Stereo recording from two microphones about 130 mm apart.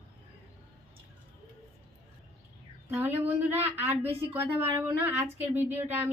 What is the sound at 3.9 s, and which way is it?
A woman's voice, 15° right (ahead or behind).